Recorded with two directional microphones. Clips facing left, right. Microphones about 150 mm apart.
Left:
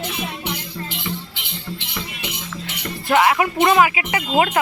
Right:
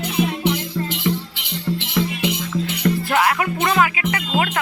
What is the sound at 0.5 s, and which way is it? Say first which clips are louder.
Music: right 6 dB; 85° right.